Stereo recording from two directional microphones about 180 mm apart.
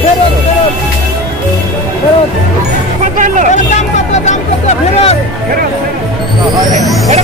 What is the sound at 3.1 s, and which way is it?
Vehicle, 45° right (ahead or behind).